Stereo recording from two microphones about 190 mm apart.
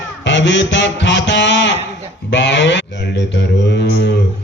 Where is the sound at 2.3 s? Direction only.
65° left (ahead or behind).